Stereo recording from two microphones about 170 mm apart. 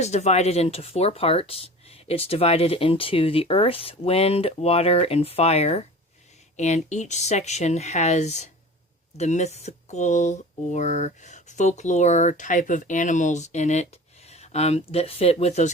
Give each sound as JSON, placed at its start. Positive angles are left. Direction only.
{"t": 0.0, "sound": "speech", "side_deg": 40}